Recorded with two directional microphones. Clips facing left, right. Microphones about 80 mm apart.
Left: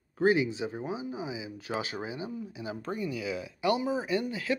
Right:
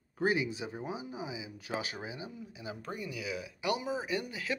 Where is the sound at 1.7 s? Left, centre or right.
Left.